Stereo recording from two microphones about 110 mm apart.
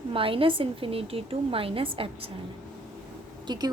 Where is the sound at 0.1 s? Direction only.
55° right (ahead or behind).